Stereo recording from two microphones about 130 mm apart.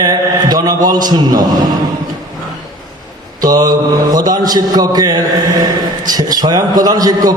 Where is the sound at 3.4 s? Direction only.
25° right (ahead or behind).